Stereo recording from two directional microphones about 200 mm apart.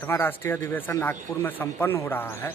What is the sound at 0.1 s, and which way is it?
A man's voice, 10° left (ahead or behind).